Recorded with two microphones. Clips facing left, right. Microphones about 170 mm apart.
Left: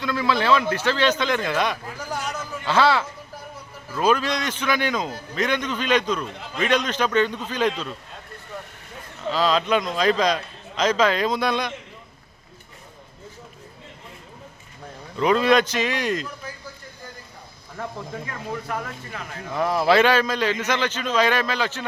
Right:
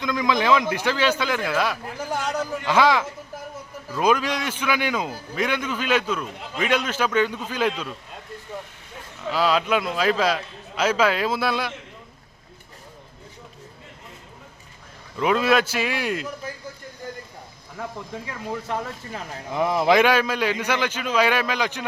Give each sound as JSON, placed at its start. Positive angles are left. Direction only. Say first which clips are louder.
{"t": 0.0, "sound": "a man's voice", "louder": "even", "side_deg": -15}
{"t": 2.2, "sound": "a sound", "louder": "right 5 dB", "side_deg": -35}
{"t": 2.6, "sound": "a man's voice", "louder": "even", "side_deg": -15}
{"t": 9.3, "sound": "a man's voice", "louder": "even", "side_deg": -10}
{"t": 15.2, "sound": "a man's voice", "louder": "left 2 dB", "side_deg": -5}
{"t": 18.7, "sound": "speech", "louder": "right 2 dB", "side_deg": -30}
{"t": 19.5, "sound": "a man's voice", "louder": "even", "side_deg": -15}